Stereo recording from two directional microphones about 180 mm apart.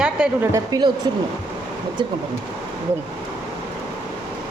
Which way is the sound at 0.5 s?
20° right (ahead or behind).